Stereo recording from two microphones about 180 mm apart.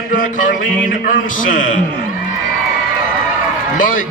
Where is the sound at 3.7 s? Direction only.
50° left (ahead or behind).